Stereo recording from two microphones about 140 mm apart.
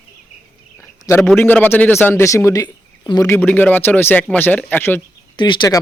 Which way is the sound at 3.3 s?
15° left (ahead or behind).